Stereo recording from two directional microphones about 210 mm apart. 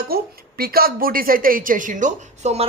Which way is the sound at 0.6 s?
45° right (ahead or behind).